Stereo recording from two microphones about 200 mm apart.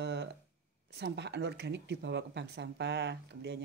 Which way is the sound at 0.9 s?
60° right (ahead or behind).